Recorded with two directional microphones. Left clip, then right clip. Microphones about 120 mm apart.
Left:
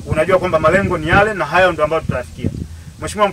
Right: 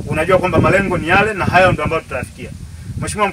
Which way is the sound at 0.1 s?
5° right (ahead or behind).